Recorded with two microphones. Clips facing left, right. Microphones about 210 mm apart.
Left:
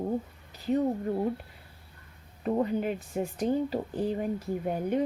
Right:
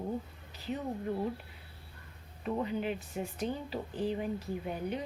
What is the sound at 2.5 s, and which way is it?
Speech, 45° left (ahead or behind).